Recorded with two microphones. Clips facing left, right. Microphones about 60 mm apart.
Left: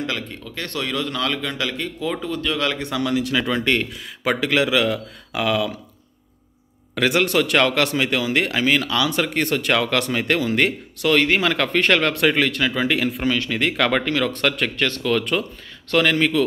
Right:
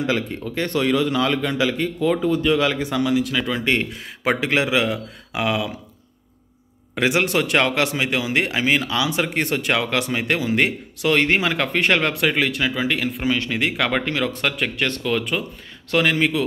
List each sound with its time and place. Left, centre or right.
0.0 s a man's voice: centre
3.9 s speech: right
7.0 s speech: centre
12.2 s a man's voice: centre
12.7 s a man's voice: centre
13.5 s a man's voice: centre